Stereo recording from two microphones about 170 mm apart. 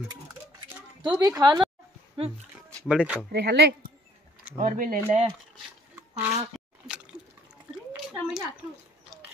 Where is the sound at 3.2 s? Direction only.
70° right (ahead or behind).